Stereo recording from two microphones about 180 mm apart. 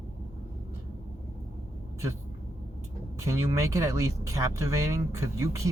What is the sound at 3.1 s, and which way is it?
Speech, 15° right (ahead or behind).